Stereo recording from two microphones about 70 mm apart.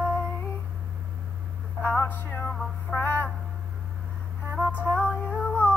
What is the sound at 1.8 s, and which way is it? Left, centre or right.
Music, left.